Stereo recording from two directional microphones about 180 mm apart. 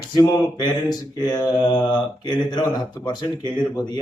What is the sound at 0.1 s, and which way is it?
Speech, 25° left (ahead or behind).